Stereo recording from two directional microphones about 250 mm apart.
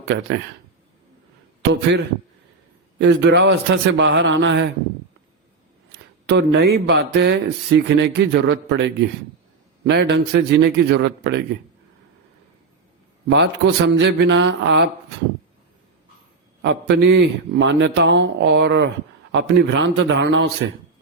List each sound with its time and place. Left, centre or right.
0.0 s speech: right
3.0 s speech: right
6.2 s speech: right
13.3 s speech: right
16.6 s speech: right